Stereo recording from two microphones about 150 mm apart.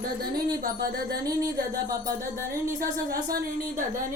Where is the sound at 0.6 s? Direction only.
90° right.